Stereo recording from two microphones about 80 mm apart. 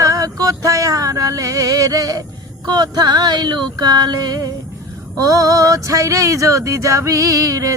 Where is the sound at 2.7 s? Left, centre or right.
Right.